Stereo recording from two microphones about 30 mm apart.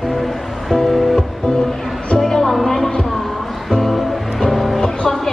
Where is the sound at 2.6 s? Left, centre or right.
Centre.